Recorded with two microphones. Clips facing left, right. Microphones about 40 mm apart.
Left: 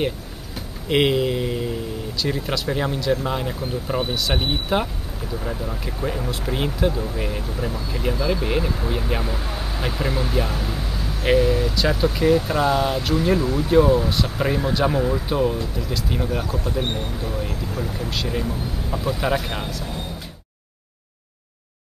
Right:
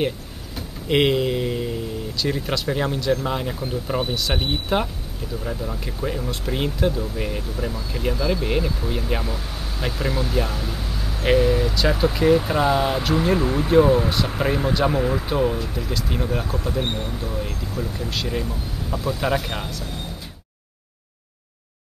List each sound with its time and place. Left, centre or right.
0.6 s speech: centre
6.3 s speech: centre
13.4 s speech: right
13.7 s speech: centre
15.0 s speech: centre
17.5 s speech: centre
18.1 s speech: centre